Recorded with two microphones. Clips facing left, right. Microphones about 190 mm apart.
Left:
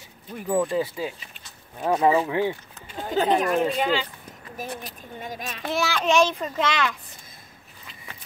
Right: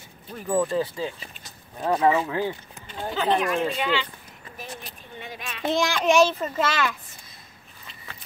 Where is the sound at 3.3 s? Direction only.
40° left (ahead or behind).